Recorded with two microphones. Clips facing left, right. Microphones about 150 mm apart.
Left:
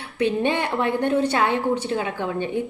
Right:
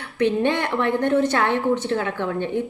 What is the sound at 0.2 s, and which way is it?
A woman's voice, 15° left (ahead or behind).